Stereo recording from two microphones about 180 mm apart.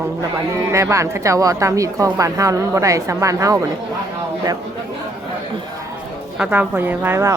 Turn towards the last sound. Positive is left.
turn(degrees=-15)  # may be behind; listen again after turning